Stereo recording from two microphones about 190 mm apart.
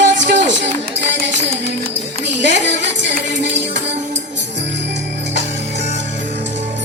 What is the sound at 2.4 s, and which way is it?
Music, 70° right (ahead or behind).